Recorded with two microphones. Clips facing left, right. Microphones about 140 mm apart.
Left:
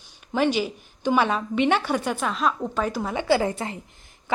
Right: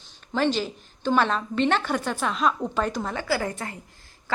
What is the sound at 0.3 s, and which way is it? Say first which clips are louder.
A woman's voice: left 2 dB; 10° left (ahead or behind).